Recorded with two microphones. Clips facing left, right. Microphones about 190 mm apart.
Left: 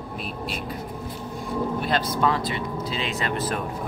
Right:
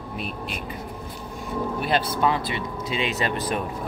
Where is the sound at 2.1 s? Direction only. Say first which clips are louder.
Even; 15° right (ahead or behind).